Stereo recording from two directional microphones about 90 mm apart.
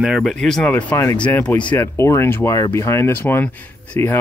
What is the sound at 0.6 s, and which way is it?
Speech, 15° left (ahead or behind).